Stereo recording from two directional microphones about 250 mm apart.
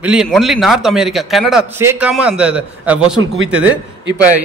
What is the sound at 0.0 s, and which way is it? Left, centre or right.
A man's voice, centre.